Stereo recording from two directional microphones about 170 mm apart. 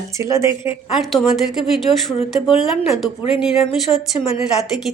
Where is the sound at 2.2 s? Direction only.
35° left (ahead or behind).